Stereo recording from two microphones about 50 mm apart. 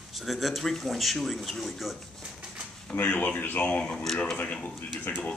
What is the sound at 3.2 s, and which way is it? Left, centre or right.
Speech, left.